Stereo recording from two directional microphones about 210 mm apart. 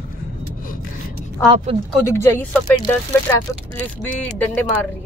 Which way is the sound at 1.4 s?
20° right (ahead or behind).